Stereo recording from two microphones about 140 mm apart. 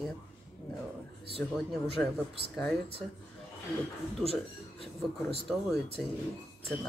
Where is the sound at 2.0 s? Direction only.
10° left (ahead or behind).